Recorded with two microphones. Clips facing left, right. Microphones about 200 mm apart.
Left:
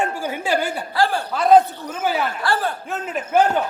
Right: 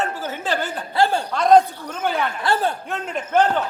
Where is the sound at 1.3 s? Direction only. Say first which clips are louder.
Left 1 dB; 5° left (ahead or behind).